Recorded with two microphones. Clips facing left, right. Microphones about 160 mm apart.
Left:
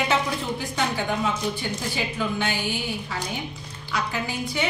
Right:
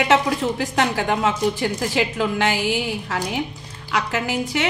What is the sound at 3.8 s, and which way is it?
Music, 90° right.